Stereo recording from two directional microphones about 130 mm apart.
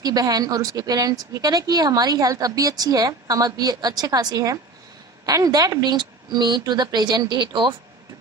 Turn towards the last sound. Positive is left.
turn(degrees=-35)  # may be behind; listen again after turning